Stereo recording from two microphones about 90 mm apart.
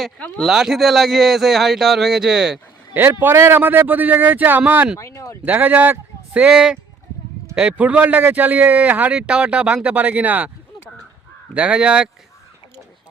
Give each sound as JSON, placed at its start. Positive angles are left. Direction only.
{"t": 0.4, "sound": "speech", "side_deg": -5}
{"t": 2.9, "sound": "speech", "side_deg": -25}
{"t": 4.9, "sound": "speech", "side_deg": 35}
{"t": 5.5, "sound": "speech", "side_deg": -20}
{"t": 6.5, "sound": "a man's voice", "side_deg": -5}
{"t": 11.5, "sound": "a man's voice", "side_deg": -15}